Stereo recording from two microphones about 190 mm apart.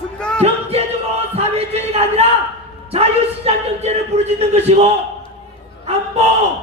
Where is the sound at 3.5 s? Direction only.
35° right (ahead or behind).